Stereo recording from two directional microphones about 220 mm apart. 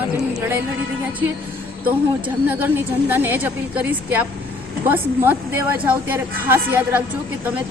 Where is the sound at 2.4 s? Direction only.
10° right (ahead or behind).